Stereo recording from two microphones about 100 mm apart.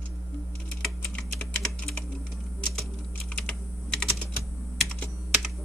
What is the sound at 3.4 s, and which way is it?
Typing, 10° left (ahead or behind).